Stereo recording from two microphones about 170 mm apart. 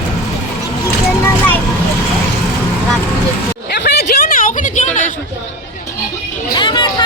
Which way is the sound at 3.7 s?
80° left.